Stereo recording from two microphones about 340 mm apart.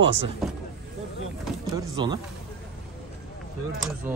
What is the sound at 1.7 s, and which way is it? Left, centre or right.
Speech, centre.